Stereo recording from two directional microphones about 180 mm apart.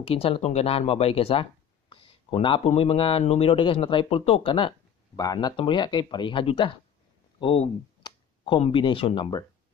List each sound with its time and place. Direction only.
0.0 s speech: 30° left (ahead or behind)